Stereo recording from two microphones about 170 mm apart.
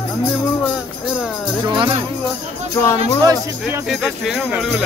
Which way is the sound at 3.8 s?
Centre (ahead or behind).